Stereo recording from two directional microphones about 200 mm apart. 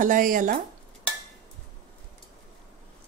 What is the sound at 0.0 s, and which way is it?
Speech, 40° right (ahead or behind).